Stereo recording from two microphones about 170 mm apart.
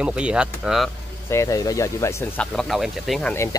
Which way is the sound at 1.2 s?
20° left (ahead or behind).